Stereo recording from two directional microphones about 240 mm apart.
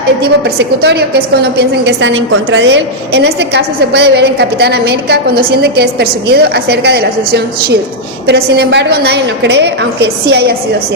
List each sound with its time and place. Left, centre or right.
0.2 s a woman's voice: right